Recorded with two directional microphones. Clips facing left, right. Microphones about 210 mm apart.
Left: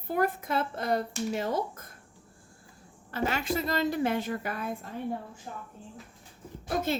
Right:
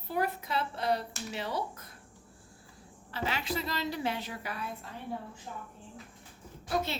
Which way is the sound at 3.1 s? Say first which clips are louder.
Left 5 dB; 50° left (ahead or behind).